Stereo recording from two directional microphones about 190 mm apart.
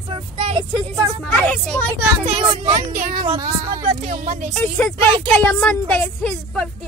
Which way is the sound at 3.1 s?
20° right (ahead or behind).